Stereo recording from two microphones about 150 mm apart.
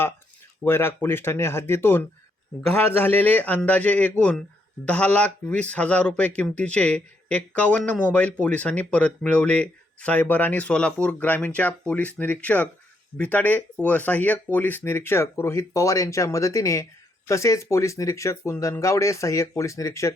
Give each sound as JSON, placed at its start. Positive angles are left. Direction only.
{"t": 0.6, "sound": "speech", "side_deg": 15}